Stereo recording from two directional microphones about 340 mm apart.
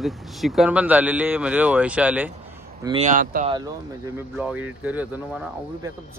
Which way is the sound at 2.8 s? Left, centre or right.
Centre.